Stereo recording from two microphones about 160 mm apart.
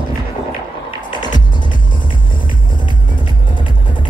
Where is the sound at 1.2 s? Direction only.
25° left (ahead or behind).